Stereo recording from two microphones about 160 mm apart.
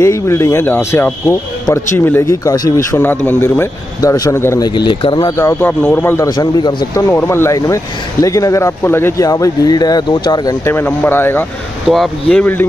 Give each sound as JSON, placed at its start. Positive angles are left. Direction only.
{"t": 0.0, "sound": "speech", "side_deg": 20}
{"t": 11.9, "sound": "speech", "side_deg": 0}